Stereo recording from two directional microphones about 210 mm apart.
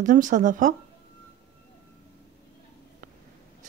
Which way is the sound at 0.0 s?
35° right (ahead or behind).